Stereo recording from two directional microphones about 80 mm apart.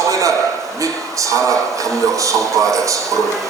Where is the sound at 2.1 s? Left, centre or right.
Right.